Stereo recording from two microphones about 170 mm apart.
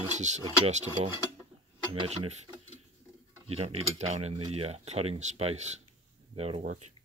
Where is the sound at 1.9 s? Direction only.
35° right (ahead or behind).